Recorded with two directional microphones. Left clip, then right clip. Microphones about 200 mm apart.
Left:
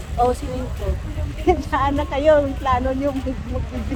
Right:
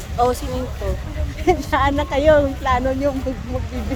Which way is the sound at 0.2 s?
30° right (ahead or behind).